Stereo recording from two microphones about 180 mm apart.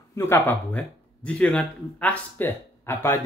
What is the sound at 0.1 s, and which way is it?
Speech, 15° left (ahead or behind).